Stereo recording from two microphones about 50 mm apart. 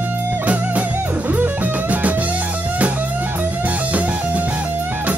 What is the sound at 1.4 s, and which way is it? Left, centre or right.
Music, right.